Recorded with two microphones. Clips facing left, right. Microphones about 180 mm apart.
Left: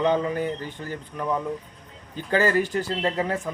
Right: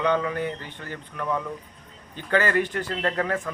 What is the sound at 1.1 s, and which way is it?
Speech, 15° left (ahead or behind).